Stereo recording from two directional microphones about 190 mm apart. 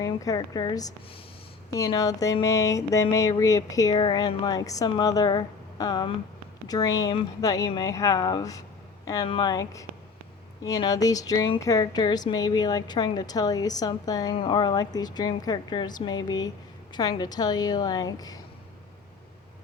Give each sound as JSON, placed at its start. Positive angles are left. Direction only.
{"t": 0.0, "sound": "speech", "side_deg": 15}
{"t": 1.7, "sound": "a sound", "side_deg": 20}
{"t": 6.7, "sound": "speech", "side_deg": 20}